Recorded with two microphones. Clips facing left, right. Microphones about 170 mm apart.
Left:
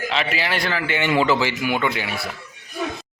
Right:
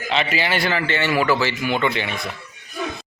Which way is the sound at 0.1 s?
Centre (ahead or behind).